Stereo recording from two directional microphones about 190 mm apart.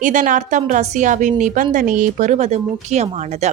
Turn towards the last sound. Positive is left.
turn(degrees=-35)  # may be behind; listen again after turning